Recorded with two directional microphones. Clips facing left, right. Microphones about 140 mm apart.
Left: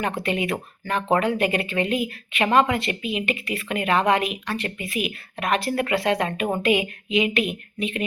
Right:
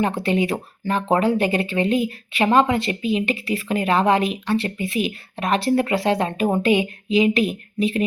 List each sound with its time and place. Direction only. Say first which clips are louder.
0.2 s speech: right 4 dB; 30° right (ahead or behind)